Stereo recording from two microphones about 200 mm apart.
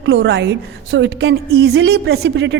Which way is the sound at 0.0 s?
65° right (ahead or behind).